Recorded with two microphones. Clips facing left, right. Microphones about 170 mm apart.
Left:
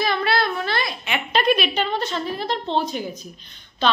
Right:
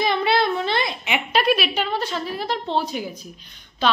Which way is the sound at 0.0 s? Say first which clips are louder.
Right 2 dB; 20° right (ahead or behind).